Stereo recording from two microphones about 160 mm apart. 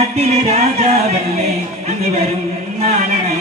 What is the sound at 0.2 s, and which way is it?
Music, 45° right (ahead or behind).